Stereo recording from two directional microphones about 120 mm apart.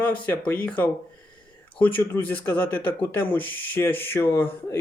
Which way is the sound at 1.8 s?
15° left (ahead or behind).